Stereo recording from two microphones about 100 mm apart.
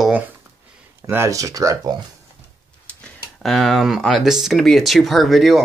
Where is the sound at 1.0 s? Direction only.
30° right (ahead or behind).